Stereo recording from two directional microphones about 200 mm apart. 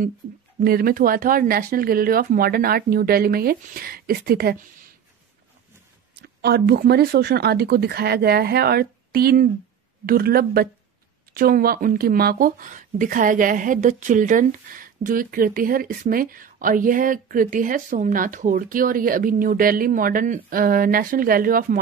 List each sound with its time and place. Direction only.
0.6 s speech: 45° right (ahead or behind)
6.2 s speech: 50° right (ahead or behind)